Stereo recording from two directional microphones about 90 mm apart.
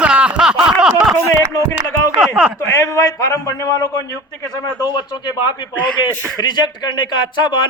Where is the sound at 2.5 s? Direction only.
30° left (ahead or behind).